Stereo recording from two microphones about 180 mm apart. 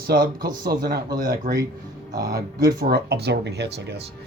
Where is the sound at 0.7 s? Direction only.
55° right (ahead or behind).